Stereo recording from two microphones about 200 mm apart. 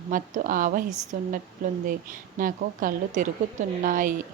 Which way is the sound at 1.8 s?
45° right (ahead or behind).